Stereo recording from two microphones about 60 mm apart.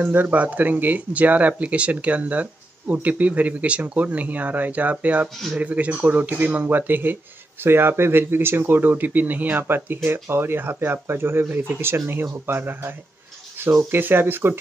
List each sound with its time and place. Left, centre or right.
0.0 s speech: right